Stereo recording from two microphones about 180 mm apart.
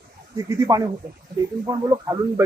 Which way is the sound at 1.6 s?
20° right (ahead or behind).